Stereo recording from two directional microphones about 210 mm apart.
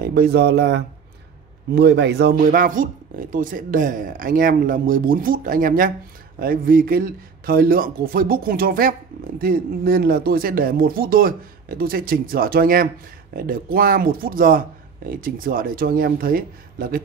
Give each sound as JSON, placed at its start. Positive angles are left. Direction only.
{"t": 0.0, "sound": "speech", "side_deg": -45}